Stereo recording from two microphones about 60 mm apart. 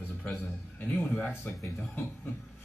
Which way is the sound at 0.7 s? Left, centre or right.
Left.